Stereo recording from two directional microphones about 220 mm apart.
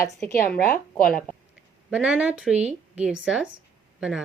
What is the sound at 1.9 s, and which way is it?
A woman's voice, 5° right (ahead or behind).